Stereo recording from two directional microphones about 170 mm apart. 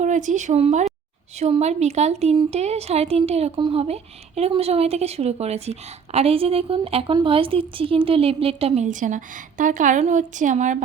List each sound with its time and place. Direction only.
0.0 s speech: 45° right (ahead or behind)